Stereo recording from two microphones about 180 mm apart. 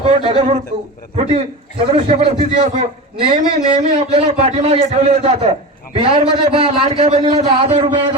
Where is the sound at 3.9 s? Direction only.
35° right (ahead or behind).